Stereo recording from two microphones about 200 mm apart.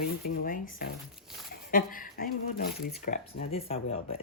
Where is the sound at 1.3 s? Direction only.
Centre (ahead or behind).